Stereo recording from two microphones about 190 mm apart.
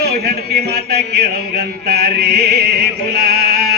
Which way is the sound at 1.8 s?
55° right (ahead or behind).